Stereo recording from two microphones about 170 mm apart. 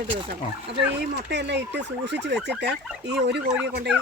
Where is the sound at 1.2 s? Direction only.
85° right.